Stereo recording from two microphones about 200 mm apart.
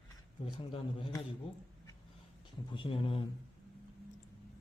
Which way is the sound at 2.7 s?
25° left (ahead or behind).